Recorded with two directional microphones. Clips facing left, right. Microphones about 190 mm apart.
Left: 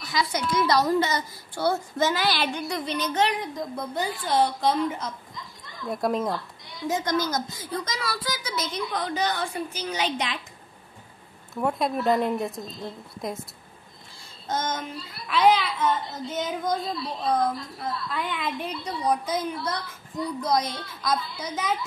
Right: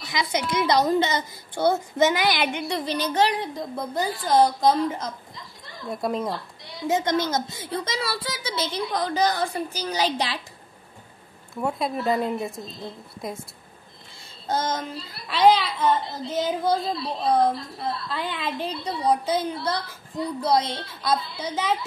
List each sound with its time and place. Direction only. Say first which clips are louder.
0.0 s a woman's voice: right 1 dB; 20° right (ahead or behind)
2.7 s a woman's voice: right 2 dB; 35° right (ahead or behind)
5.9 s speech: left 1 dB; centre (ahead or behind)
6.9 s a woman's voice: right 3 dB; 25° right (ahead or behind)
11.5 s speech: left 1 dB; centre (ahead or behind)
14.5 s a woman's voice: right 3 dB; 35° right (ahead or behind)